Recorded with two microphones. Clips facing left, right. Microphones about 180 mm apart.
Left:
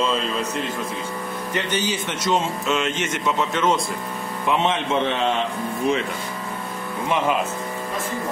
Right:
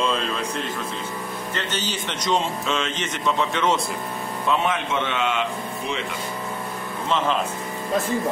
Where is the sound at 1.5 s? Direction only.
10° left (ahead or behind).